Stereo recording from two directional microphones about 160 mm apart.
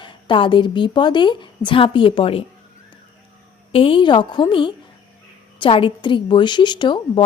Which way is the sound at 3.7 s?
35° left (ahead or behind).